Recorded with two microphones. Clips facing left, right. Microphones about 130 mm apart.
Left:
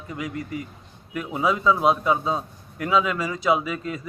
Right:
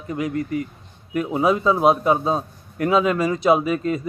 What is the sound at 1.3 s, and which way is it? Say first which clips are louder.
Speech: right 2 dB; 25° right (ahead or behind).